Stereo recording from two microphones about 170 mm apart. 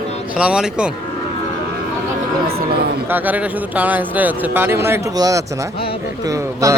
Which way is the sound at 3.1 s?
10° right (ahead or behind).